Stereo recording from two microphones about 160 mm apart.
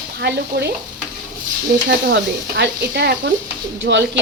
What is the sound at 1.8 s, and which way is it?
Stir, 90° right.